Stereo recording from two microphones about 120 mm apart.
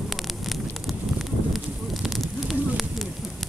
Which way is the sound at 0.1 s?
Centre (ahead or behind).